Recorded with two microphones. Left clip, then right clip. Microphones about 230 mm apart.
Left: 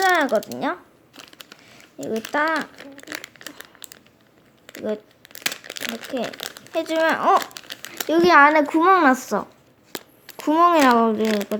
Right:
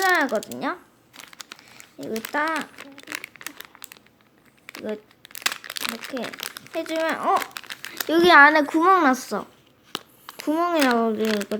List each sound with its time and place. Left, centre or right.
0.0 s speech: centre
1.1 s a sound: centre
2.0 s speech: centre
2.7 s crumpling: centre
6.7 s speech: centre
7.5 s speech: centre